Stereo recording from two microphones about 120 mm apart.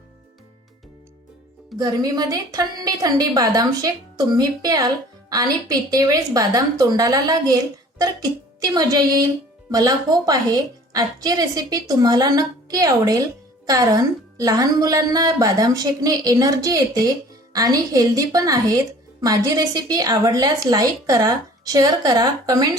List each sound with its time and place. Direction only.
1.8 s a woman's voice: 35° right (ahead or behind)